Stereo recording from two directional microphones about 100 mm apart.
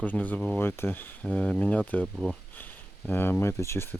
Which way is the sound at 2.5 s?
20° left (ahead or behind).